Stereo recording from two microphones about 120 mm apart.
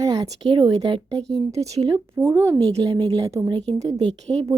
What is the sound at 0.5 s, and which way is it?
Speech, 40° right (ahead or behind).